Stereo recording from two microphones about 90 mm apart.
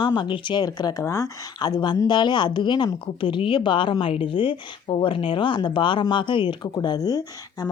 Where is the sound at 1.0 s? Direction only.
35° left (ahead or behind).